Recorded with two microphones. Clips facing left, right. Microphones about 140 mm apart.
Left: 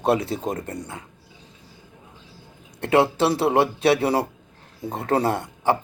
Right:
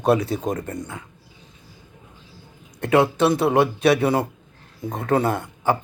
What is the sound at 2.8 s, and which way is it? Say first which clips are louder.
Speech: right 1 dB; 30° left (ahead or behind).